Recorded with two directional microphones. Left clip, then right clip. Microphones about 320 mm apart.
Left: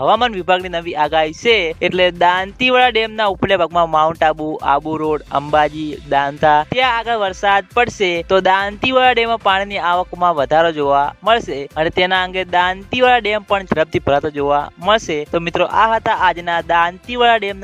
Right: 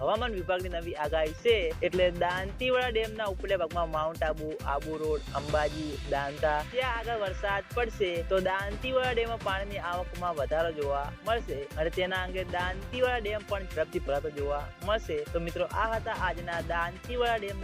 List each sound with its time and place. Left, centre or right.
0.0 s speech: left